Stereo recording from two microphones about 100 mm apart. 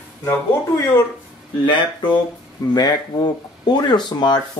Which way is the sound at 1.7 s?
55° left (ahead or behind).